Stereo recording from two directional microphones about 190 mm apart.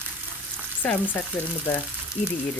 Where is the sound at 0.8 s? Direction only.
10° left (ahead or behind).